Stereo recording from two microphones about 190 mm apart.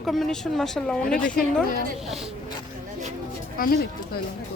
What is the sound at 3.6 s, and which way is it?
Speech, 50° left (ahead or behind).